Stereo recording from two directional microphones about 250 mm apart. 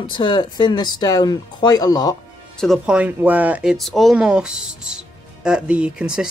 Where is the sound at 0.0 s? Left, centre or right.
Centre.